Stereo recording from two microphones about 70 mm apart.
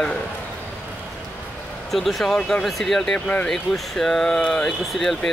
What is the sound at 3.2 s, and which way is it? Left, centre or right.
Speech, left.